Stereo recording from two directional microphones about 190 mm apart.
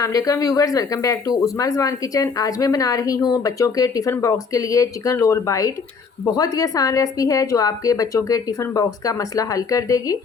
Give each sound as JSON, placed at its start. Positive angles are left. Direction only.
{"t": 0.0, "sound": "a woman's voice", "side_deg": 15}